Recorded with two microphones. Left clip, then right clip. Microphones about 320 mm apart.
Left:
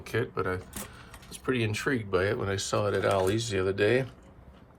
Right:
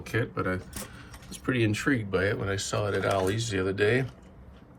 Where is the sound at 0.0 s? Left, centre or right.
Centre.